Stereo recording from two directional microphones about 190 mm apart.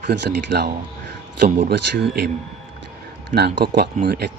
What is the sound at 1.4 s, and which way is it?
Speech, 35° right (ahead or behind).